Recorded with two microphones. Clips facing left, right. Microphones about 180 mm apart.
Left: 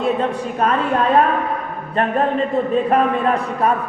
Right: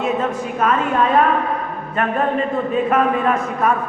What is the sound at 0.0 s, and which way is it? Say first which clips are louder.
Speech: left 1 dB; 35° left (ahead or behind).